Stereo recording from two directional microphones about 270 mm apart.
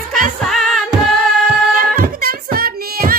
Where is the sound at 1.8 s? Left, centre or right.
Right.